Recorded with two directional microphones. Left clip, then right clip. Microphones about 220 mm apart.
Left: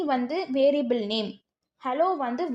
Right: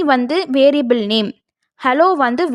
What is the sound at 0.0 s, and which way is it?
A woman's voice, 35° right (ahead or behind).